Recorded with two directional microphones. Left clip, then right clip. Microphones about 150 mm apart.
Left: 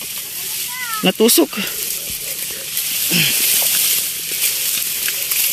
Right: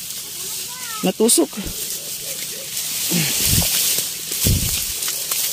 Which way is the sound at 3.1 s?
15° right (ahead or behind).